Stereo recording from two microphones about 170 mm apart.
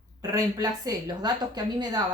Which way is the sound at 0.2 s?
20° right (ahead or behind).